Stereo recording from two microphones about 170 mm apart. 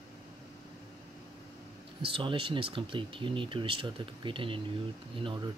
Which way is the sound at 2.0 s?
30° right (ahead or behind).